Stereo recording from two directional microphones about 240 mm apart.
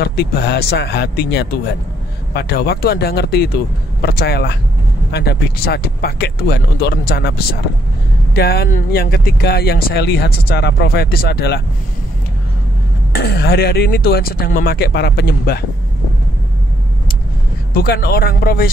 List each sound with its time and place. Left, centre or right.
0.0 s speech: left
13.1 s speech: left
17.7 s speech: left